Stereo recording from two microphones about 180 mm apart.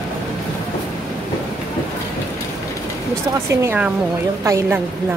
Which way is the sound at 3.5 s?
15° right (ahead or behind).